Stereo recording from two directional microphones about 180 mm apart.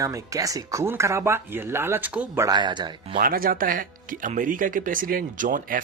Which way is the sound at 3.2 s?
50° right (ahead or behind).